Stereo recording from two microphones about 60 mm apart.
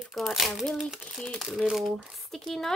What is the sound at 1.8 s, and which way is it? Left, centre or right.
Speech, centre.